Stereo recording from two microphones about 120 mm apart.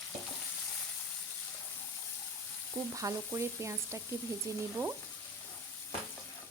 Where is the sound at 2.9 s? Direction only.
25° right (ahead or behind).